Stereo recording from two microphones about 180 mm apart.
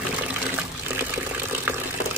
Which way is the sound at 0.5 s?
10° right (ahead or behind).